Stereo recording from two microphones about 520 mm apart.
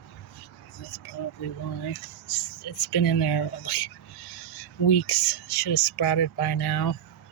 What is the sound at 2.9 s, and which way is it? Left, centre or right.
Speech, left.